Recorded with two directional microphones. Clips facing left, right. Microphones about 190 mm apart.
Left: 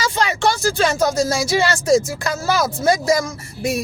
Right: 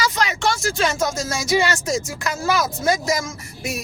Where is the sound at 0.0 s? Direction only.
30° left (ahead or behind).